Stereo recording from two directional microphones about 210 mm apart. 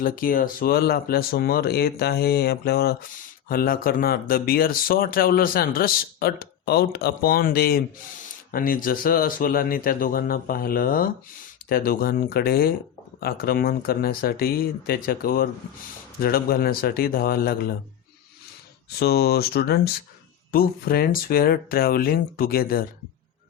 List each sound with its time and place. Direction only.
0.0 s speech: 40° left (ahead or behind)
18.9 s speech: 50° left (ahead or behind)